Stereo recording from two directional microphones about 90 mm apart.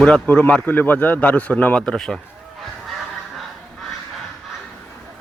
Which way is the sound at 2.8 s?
Centre (ahead or behind).